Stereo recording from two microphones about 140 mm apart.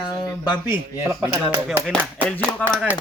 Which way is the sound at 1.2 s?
15° right (ahead or behind).